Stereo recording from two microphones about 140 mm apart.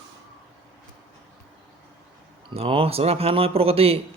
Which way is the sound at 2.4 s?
40° right (ahead or behind).